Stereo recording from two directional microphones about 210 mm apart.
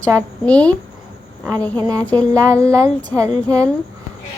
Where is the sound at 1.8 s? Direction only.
15° right (ahead or behind).